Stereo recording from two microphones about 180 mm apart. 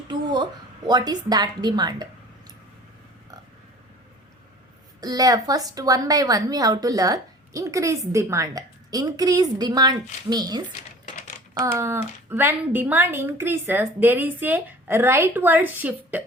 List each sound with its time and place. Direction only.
0.1 s a woman's voice: 25° right (ahead or behind)
4.9 s a woman's voice: 20° right (ahead or behind)